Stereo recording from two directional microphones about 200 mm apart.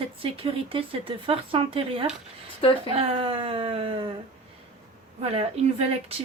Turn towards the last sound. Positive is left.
turn(degrees=-30)  # may be behind; listen again after turning